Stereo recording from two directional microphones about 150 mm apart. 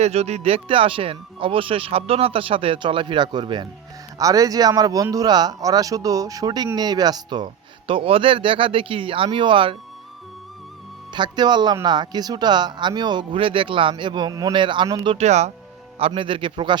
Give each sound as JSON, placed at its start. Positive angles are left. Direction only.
{"t": 0.0, "sound": "speech", "side_deg": -45}
{"t": 11.1, "sound": "speech", "side_deg": -30}
{"t": 15.1, "sound": "speech", "side_deg": -50}
{"t": 16.0, "sound": "speech", "side_deg": -40}